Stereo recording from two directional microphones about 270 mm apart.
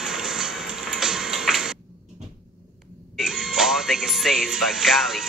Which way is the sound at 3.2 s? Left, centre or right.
Centre.